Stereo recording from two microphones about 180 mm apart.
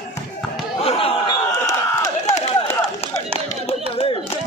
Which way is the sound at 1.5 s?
20° left (ahead or behind).